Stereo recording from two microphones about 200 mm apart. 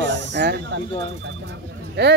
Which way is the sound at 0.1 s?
60° right (ahead or behind).